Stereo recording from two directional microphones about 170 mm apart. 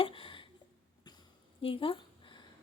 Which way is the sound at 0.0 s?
30° left (ahead or behind).